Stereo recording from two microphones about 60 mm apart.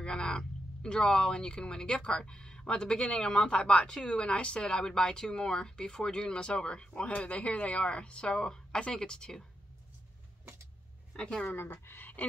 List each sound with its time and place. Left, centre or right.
0.0 s speech: centre
11.1 s speech: centre
11.4 s speech: left